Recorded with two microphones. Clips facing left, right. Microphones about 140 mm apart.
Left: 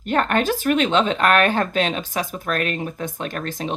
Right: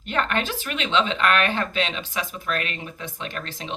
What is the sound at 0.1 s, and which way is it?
Speech, 45° left (ahead or behind).